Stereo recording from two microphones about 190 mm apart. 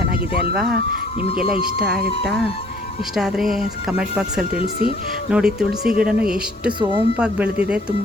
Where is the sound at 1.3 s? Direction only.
50° right (ahead or behind).